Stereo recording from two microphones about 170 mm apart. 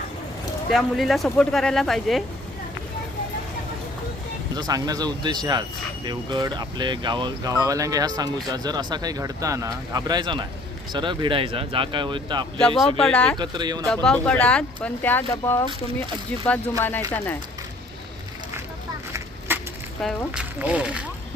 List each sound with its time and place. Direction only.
0.7 s speech: centre (ahead or behind)
4.5 s speech: 20° right (ahead or behind)
12.5 s speech: 5° left (ahead or behind)
13.4 s speech: 25° right (ahead or behind)
13.8 s speech: 5° left (ahead or behind)
19.5 s a sound: 10° right (ahead or behind)
20.0 s speech: centre (ahead or behind)